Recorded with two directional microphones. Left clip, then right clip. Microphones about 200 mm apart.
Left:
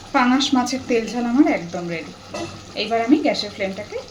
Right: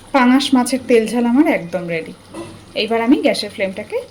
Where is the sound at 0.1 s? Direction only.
45° right (ahead or behind).